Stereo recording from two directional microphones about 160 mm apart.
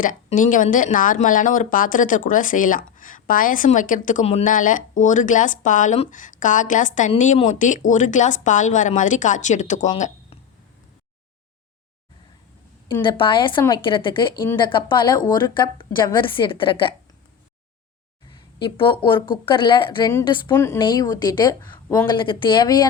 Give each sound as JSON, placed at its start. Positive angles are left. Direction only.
{"t": 0.0, "sound": "speech", "side_deg": 55}
{"t": 4.4, "sound": "speech", "side_deg": 55}
{"t": 12.9, "sound": "a woman's voice", "side_deg": 30}
{"t": 18.3, "sound": "speech", "side_deg": 30}
{"t": 20.5, "sound": "a woman's voice", "side_deg": 15}